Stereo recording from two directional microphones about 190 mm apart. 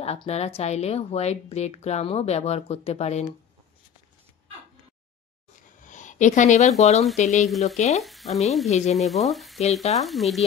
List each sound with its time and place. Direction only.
0.0 s speech: 35° left (ahead or behind)
5.6 s a sound: 40° left (ahead or behind)
7.2 s speech: 35° left (ahead or behind)
8.0 s frying: centre (ahead or behind)
8.6 s speech: 35° left (ahead or behind)
8.9 s speech: centre (ahead or behind)